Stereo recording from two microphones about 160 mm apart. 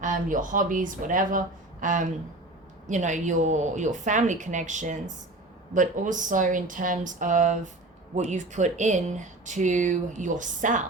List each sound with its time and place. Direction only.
0.0 s speech: 55° right (ahead or behind)